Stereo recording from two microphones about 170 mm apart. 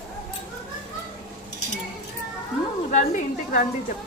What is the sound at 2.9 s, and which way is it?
Speech, 50° left (ahead or behind).